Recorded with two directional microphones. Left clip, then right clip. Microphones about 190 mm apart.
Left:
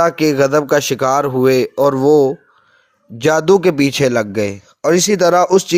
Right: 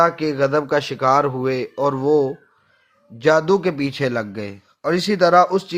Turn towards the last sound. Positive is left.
turn(degrees=45)  # may be behind; listen again after turning